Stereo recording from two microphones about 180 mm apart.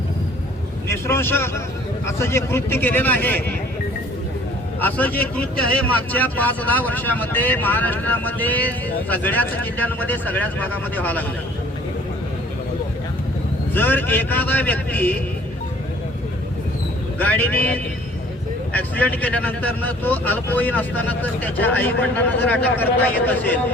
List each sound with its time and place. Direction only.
0.9 s speech: 15° left (ahead or behind)
4.8 s speech: 10° left (ahead or behind)
13.7 s speech: 10° left (ahead or behind)
17.2 s speech: 10° left (ahead or behind)